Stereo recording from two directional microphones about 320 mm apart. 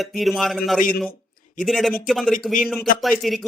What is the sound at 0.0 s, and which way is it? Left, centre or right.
Speech, centre.